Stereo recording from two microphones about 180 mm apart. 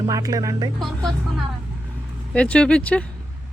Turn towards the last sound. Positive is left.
turn(degrees=5)  # may be behind; listen again after turning